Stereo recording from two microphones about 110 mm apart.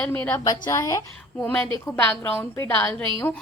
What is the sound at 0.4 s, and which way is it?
Speech, 30° left (ahead or behind).